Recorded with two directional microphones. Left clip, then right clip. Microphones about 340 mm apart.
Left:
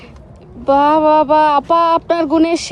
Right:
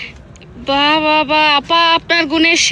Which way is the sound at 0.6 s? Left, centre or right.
Centre.